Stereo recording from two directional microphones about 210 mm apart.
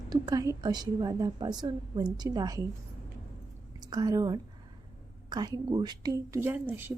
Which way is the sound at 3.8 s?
20° right (ahead or behind).